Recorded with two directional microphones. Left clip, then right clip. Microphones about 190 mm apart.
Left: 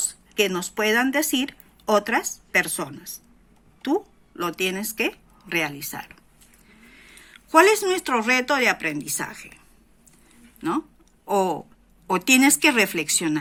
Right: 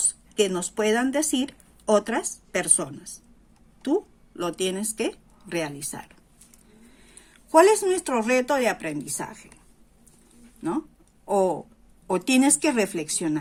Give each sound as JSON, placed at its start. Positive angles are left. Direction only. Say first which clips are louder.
{"t": 0.3, "sound": "speech", "louder": "left 1 dB", "side_deg": -20}
{"t": 7.3, "sound": "speech", "louder": "left 1 dB", "side_deg": -10}
{"t": 10.6, "sound": "speech", "louder": "left 3 dB", "side_deg": -10}